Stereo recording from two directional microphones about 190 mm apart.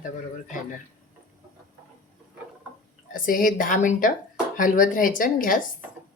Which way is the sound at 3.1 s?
45° left (ahead or behind).